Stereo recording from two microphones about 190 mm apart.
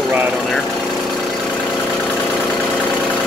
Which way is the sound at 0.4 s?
Centre (ahead or behind).